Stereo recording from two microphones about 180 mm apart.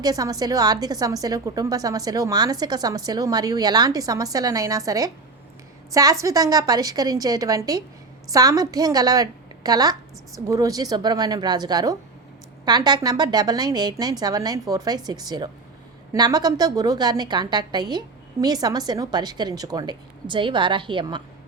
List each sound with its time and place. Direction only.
0.0 s a woman's voice: 20° right (ahead or behind)